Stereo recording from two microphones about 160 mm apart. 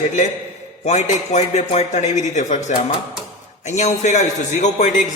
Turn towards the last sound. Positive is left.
turn(degrees=50)  # may be behind; listen again after turning